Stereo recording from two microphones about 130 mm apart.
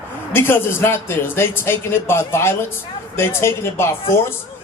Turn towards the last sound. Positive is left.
turn(degrees=20)  # may be behind; listen again after turning